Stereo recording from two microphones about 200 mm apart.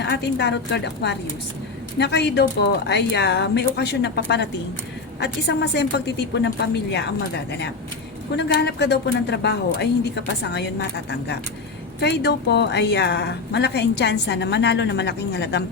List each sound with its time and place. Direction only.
0.0 s a woman's voice: 60° left (ahead or behind)
8.4 s a woman's voice: 55° left (ahead or behind)